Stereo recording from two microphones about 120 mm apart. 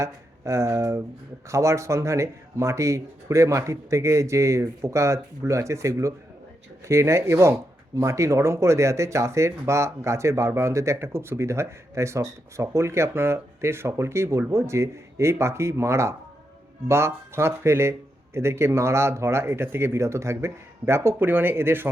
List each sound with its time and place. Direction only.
0.0 s speech: 25° right (ahead or behind)